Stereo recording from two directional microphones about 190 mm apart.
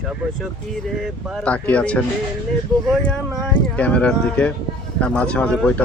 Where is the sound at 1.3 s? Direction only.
5° left (ahead or behind).